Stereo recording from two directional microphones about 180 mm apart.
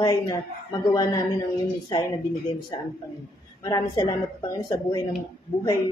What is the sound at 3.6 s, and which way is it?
A man's voice, 20° left (ahead or behind).